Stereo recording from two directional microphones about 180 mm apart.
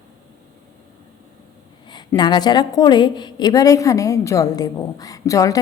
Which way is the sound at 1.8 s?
25° left (ahead or behind).